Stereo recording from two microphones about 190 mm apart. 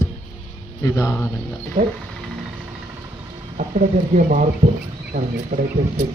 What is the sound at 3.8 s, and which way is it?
Speech, 45° right (ahead or behind).